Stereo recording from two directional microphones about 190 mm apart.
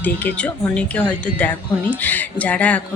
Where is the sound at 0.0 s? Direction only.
10° left (ahead or behind).